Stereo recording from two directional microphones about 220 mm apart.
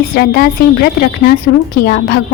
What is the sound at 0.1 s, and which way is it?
A woman's voice, 40° left (ahead or behind).